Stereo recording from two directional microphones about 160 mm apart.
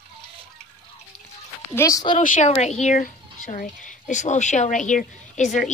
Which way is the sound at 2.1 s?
50° left (ahead or behind).